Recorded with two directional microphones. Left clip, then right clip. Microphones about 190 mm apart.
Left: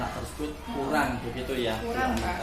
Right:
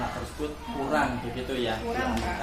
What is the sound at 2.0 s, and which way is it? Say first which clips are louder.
Speech: left 1 dB; 15° left (ahead or behind).